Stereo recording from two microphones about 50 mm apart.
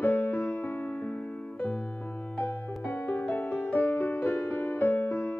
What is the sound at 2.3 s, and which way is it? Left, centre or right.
Music, left.